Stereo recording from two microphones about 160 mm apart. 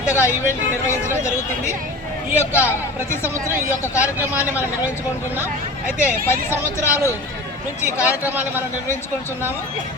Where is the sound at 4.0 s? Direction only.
10° right (ahead or behind).